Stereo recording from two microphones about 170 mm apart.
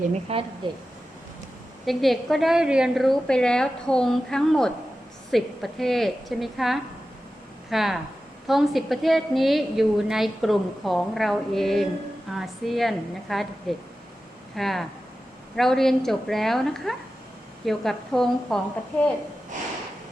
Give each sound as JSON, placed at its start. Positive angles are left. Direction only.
{"t": 0.3, "sound": "a woman's voice", "side_deg": -35}
{"t": 1.8, "sound": "a woman's voice", "side_deg": 0}